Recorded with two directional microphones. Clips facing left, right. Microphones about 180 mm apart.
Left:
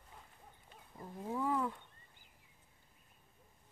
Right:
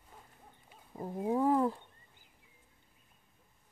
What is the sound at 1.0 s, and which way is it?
Speech, 60° right (ahead or behind).